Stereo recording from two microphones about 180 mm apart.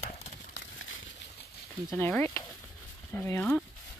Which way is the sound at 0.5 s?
90° left.